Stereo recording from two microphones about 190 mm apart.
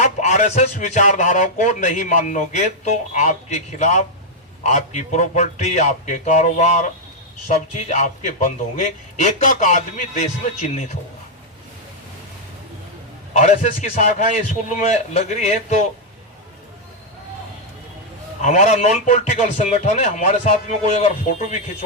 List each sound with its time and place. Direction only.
0.0 s speech: 35° left (ahead or behind)
13.3 s speech: 40° left (ahead or behind)
18.4 s speech: 40° left (ahead or behind)